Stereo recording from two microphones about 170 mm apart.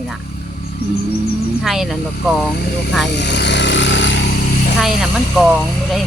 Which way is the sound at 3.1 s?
90° left.